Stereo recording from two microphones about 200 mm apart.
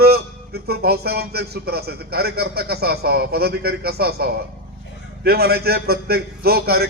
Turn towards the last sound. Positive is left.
turn(degrees=-50)  # may be behind; listen again after turning